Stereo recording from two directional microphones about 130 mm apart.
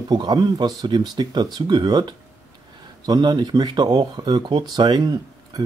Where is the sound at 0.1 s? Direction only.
30° right (ahead or behind).